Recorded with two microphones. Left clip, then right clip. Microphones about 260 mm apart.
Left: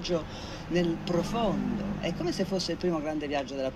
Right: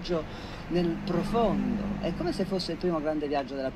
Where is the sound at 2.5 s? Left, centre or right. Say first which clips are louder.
Even; left.